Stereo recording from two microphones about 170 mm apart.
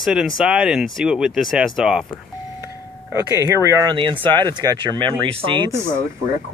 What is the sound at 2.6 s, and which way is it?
Speech, 20° right (ahead or behind).